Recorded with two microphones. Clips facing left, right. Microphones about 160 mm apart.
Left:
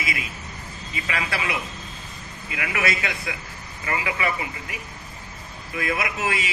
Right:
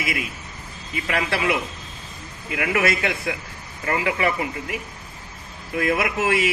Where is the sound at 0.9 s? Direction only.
50° right (ahead or behind).